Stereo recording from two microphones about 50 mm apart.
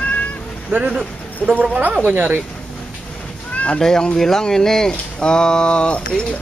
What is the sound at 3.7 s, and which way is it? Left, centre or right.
Speech, centre.